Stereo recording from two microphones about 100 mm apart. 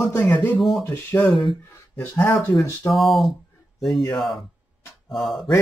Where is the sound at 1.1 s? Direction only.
25° left (ahead or behind).